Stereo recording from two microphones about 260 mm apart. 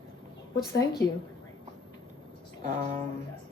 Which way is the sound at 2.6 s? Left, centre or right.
Right.